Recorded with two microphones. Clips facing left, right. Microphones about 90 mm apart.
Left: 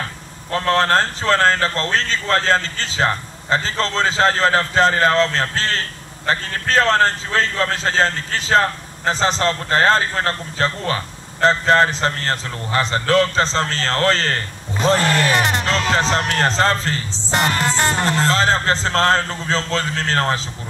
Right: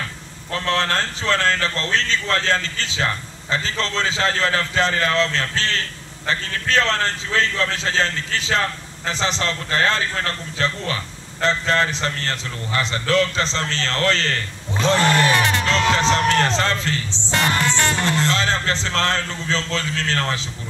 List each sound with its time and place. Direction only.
0.5 s speech: 40° left (ahead or behind)
15.0 s speech: 25° right (ahead or behind)
15.3 s music: 20° left (ahead or behind)
15.9 s speech: 40° left (ahead or behind)
17.3 s speech: 25° left (ahead or behind)